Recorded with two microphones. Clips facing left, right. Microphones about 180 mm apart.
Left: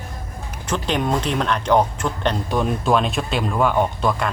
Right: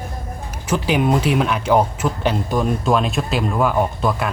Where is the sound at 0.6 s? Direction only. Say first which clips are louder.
Right 4 dB; 5° right (ahead or behind).